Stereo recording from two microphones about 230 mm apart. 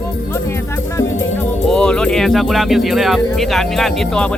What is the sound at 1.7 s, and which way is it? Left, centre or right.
Speech, centre.